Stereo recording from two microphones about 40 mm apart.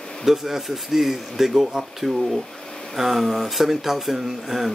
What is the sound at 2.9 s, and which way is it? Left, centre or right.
Speech, centre.